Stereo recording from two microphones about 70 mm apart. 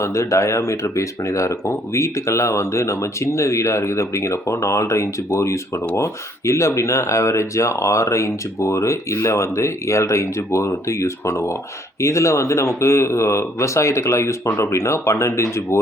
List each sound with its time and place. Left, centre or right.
0.0 s speech: left